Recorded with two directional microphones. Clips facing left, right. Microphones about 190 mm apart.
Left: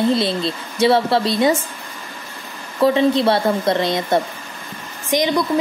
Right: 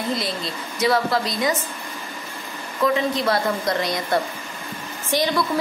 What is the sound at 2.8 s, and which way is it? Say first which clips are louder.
A woman's voice: left 6 dB; 30° left (ahead or behind).